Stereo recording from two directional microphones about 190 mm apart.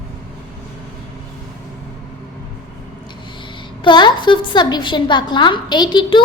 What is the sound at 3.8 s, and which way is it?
A woman's voice, 25° left (ahead or behind).